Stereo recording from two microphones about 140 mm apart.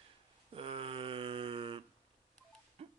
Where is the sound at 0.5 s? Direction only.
40° right (ahead or behind).